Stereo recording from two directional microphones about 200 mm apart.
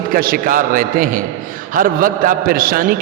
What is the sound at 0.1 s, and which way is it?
A man's voice, 45° right (ahead or behind).